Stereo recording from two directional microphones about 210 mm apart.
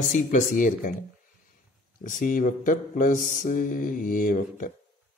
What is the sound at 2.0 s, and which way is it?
Speech, 40° left (ahead or behind).